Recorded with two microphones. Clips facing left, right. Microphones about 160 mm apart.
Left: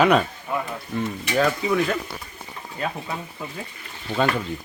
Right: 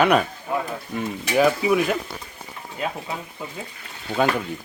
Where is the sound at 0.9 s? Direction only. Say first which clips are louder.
Right 1 dB; 15° right (ahead or behind).